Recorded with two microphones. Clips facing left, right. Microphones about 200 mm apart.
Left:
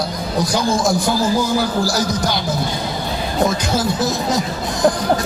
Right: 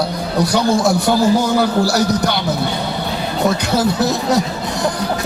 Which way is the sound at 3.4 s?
65° right (ahead or behind).